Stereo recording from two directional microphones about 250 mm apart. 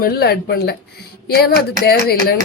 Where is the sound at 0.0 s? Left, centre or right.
Left.